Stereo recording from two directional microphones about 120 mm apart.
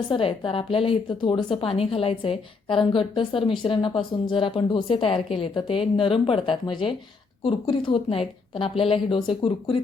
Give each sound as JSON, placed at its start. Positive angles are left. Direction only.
{"t": 0.1, "sound": "a woman's voice", "side_deg": 50}